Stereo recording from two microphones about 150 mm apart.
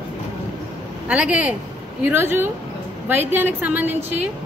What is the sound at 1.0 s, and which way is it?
Speech, 10° right (ahead or behind).